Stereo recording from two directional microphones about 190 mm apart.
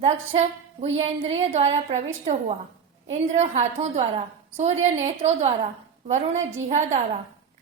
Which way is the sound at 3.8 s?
35° right (ahead or behind).